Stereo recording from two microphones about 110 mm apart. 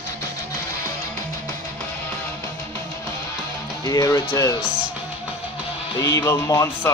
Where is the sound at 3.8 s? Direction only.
30° left (ahead or behind).